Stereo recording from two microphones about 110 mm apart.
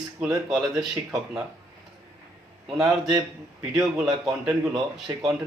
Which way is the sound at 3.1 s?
35° right (ahead or behind).